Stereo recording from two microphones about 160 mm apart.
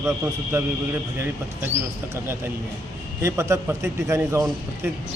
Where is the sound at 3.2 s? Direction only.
20° right (ahead or behind).